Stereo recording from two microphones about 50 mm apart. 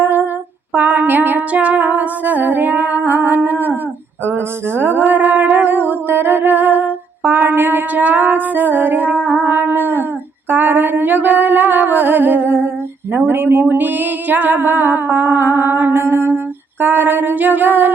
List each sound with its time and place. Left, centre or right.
0.0 s humming: right
0.7 s music: right
1.5 s music: right
4.3 s music: right
13.1 s music: right